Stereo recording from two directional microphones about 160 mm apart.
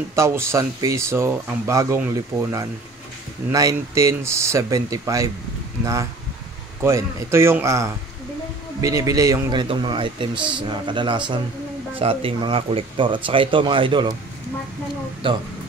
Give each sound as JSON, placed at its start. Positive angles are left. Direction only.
{"t": 0.1, "sound": "speech", "side_deg": -15}
{"t": 3.5, "sound": "speech", "side_deg": -20}
{"t": 6.8, "sound": "speech", "side_deg": -15}
{"t": 15.2, "sound": "speech", "side_deg": -30}